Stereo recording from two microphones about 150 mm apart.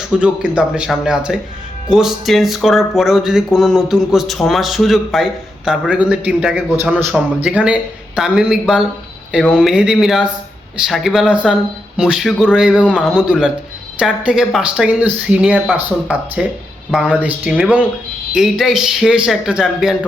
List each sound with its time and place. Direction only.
0.1 s speech: 5° right (ahead or behind)